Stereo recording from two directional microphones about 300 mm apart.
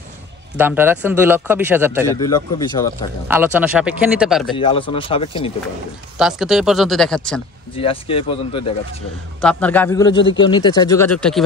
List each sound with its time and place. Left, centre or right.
0.6 s speech: centre
2.1 s a man's voice: centre
3.3 s speech: centre
4.6 s a man's voice: centre
6.1 s speech: centre
7.7 s a man's voice: centre
9.4 s a man's voice: centre